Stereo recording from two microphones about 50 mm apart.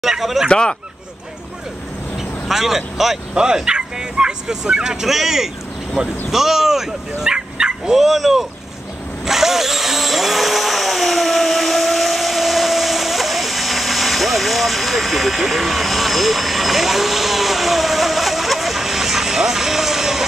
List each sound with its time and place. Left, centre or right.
0.0 s speech: centre
0.5 s speech: centre
2.1 s speech: centre
9.2 s a sound: centre